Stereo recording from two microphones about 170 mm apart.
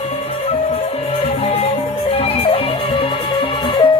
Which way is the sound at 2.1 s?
35° left (ahead or behind).